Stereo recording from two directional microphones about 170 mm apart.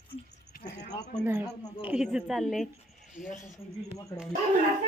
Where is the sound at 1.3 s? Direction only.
10° right (ahead or behind).